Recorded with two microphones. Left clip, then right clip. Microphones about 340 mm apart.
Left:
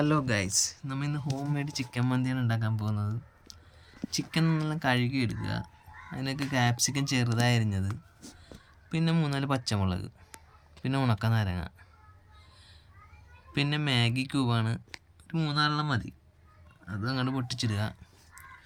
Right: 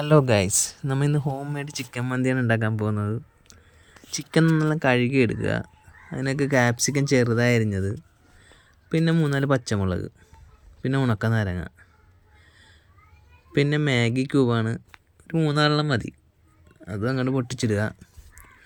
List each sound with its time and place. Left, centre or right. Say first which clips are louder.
0.0 s speech: right 9 dB; centre
8.9 s speech: right 8 dB; centre
13.5 s speech: right 7 dB; centre